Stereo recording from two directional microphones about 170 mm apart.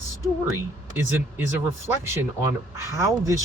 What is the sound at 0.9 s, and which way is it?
Speech, 15° right (ahead or behind).